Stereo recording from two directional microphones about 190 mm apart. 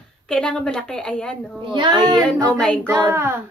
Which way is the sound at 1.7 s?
25° right (ahead or behind).